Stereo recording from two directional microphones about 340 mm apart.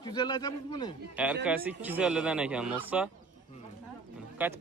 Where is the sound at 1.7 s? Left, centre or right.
Centre.